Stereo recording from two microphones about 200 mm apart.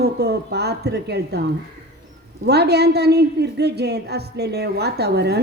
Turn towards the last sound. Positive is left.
turn(degrees=-55)  # may be behind; listen again after turning